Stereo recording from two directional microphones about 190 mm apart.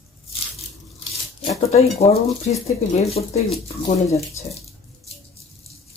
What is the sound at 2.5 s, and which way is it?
Speech, 35° left (ahead or behind).